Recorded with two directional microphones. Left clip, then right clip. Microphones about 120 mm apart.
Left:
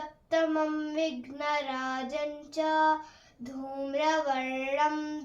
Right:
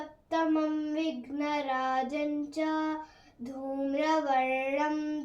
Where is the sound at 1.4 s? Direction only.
35° right (ahead or behind).